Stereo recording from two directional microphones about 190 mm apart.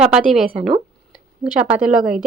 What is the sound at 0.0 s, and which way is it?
A woman's voice, 5° right (ahead or behind).